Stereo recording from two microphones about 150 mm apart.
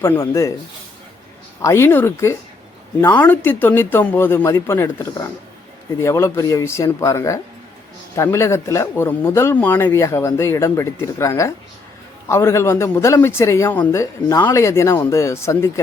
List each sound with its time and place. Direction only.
0.0 s a man's voice: 20° left (ahead or behind)
1.6 s a man's voice: 15° left (ahead or behind)